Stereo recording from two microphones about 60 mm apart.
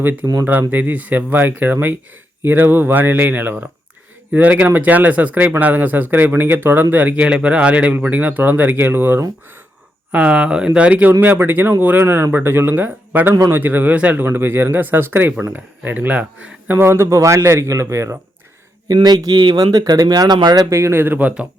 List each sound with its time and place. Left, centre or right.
0.0 s speech: right
10.1 s speech: right
11.2 s speech: right
12.0 s speech: right
13.9 s speech: right
14.3 s speech: right
16.7 s a man's voice: right
18.9 s speech: right
20.7 s speech: right